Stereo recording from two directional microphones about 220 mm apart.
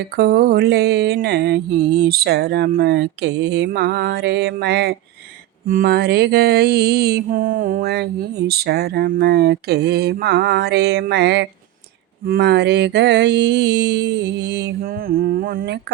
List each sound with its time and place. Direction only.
0.2 s mantra: 45° right (ahead or behind)